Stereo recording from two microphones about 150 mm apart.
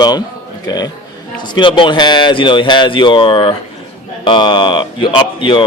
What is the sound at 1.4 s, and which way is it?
Speech, 30° left (ahead or behind).